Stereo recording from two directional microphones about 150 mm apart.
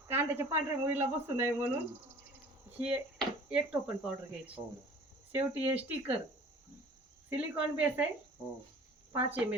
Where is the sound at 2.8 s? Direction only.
5° right (ahead or behind).